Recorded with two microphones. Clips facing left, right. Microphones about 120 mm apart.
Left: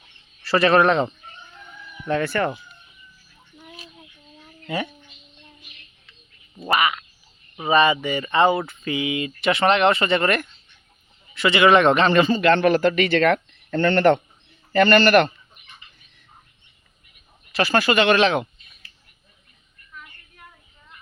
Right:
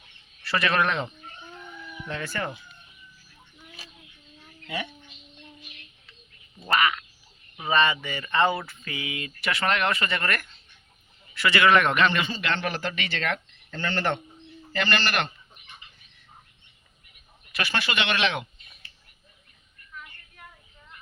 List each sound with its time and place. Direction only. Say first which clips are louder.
0.4 s speech: left 8 dB; 35° left (ahead or behind)
2.0 s speech: left 10 dB; 60° left (ahead or behind)
4.6 s speech: left 6 dB; 45° left (ahead or behind)
6.7 s frog: left 3 dB; 10° left (ahead or behind)
7.6 s speech: left 6 dB; 10° left (ahead or behind); by 12.3 s 35° left (ahead or behind)
12.3 s speech: left 12 dB; 50° left (ahead or behind)
17.5 s speech: left 10 dB; 40° left (ahead or behind)
19.9 s a sound: even; centre (ahead or behind)